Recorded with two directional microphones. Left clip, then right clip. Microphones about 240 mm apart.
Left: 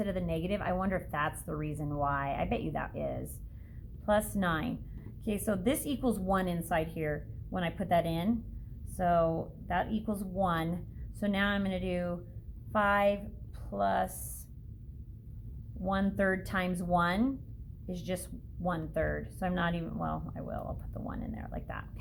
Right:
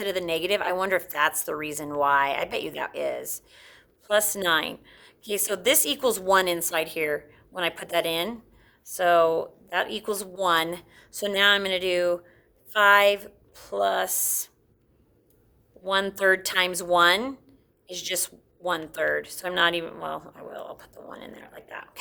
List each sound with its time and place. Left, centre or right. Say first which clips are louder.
0.0 s a woman's voice: right 8 dB; right
15.9 s a woman's voice: right 9 dB; right